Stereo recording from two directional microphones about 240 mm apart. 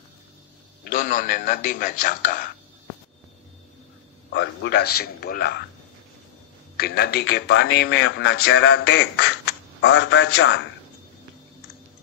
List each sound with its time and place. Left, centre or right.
0.8 s a man's voice: left
4.3 s a man's voice: left
6.8 s a man's voice: left